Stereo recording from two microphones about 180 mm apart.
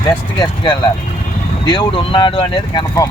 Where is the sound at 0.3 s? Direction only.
25° left (ahead or behind).